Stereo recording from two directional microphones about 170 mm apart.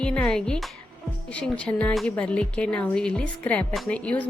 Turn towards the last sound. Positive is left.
turn(degrees=5)  # may be behind; listen again after turning